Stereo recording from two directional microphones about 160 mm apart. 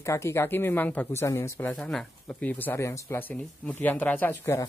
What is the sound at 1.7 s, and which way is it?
Speech, centre (ahead or behind).